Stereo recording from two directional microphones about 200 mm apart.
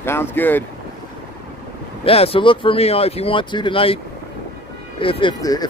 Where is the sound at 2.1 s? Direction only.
30° left (ahead or behind).